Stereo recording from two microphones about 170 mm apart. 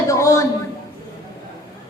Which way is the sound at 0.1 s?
20° left (ahead or behind).